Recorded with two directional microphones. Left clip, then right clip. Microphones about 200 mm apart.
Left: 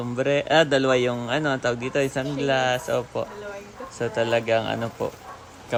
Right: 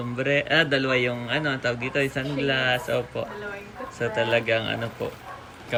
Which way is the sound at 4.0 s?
10° left (ahead or behind).